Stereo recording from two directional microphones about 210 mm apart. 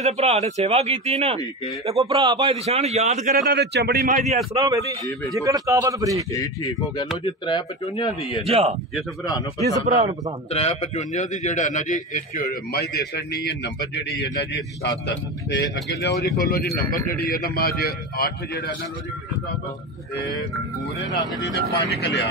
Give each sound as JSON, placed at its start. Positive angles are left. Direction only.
{"t": 0.0, "sound": "a man's voice", "side_deg": -30}
{"t": 3.4, "sound": "speech", "side_deg": -50}
{"t": 4.6, "sound": "a man's voice", "side_deg": -15}
{"t": 6.3, "sound": "a man's voice", "side_deg": 15}
{"t": 8.5, "sound": "a man's voice", "side_deg": -30}
{"t": 9.2, "sound": "speech", "side_deg": 20}
{"t": 9.8, "sound": "a man's voice", "side_deg": -30}
{"t": 10.5, "sound": "a man's voice", "side_deg": 30}
{"t": 21.4, "sound": "a man's voice", "side_deg": 60}